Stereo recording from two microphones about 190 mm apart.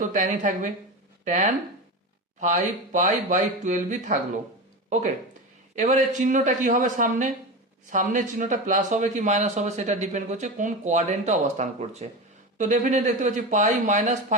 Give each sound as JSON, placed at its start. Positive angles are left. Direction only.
{"t": 0.0, "sound": "a man's voice", "side_deg": -40}